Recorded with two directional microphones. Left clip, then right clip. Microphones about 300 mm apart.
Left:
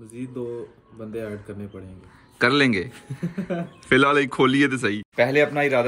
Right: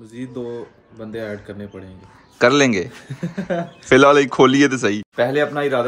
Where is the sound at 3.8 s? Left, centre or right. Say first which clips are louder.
Right 6 dB; centre.